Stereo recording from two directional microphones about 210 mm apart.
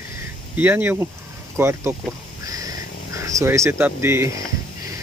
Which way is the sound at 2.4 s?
15° right (ahead or behind).